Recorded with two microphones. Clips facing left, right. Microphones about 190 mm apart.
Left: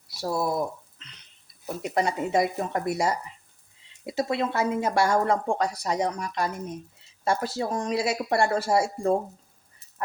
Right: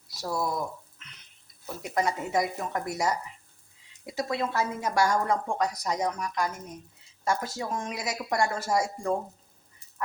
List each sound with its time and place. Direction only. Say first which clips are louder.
0.1 s frying: left 3 dB; 25° left (ahead or behind)
1.6 s speech: left 2 dB; 25° left (ahead or behind)